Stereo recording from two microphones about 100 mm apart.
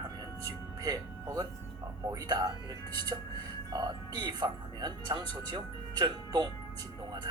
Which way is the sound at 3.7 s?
40° right (ahead or behind).